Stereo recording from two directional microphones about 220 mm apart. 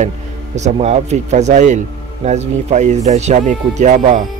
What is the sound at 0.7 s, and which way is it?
Speech, 30° right (ahead or behind).